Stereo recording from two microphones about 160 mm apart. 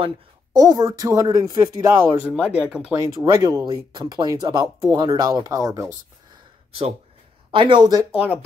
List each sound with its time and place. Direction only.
0.0 s speech: 25° right (ahead or behind)
2.2 s speech: 10° right (ahead or behind)
3.0 s speech: 20° right (ahead or behind)
7.5 s speech: 30° right (ahead or behind)
8.0 s speech: 10° right (ahead or behind)